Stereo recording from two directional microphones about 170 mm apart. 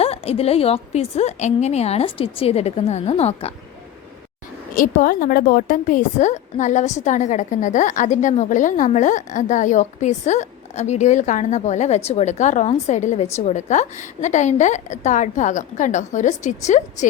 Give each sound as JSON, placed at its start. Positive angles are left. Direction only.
{"t": 0.0, "sound": "a woman's voice", "side_deg": 35}
{"t": 4.7, "sound": "a woman's voice", "side_deg": 55}